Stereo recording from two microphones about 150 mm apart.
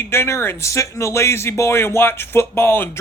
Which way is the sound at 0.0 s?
15° left (ahead or behind).